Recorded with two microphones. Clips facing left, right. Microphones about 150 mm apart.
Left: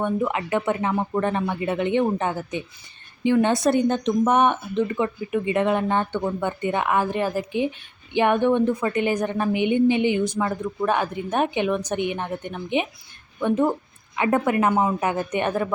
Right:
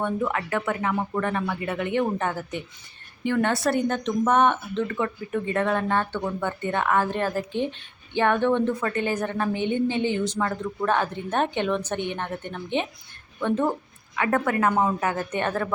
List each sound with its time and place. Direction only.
0.0 s a woman's voice: 15° left (ahead or behind)